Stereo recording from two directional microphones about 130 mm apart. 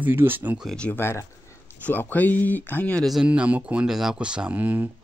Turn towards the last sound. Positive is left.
turn(degrees=-15)  # may be behind; listen again after turning